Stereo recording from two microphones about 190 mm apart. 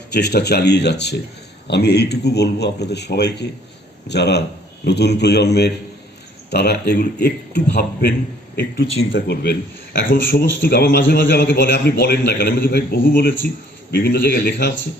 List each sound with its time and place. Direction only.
0.1 s a man's voice: 60° left (ahead or behind)
10.6 s a man's voice: 60° left (ahead or behind)